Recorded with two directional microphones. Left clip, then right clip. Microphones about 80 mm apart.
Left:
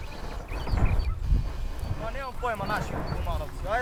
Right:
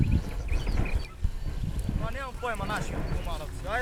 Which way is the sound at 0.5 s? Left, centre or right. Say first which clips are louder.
Left 2 dB; right.